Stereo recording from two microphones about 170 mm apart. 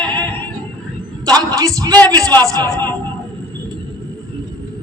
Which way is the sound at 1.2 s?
25° right (ahead or behind).